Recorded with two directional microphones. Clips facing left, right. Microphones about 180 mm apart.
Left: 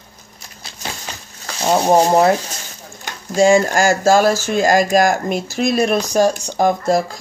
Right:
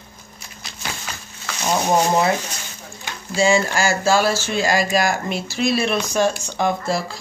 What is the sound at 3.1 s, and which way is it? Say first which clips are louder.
Speech: left 5 dB; 45° left (ahead or behind).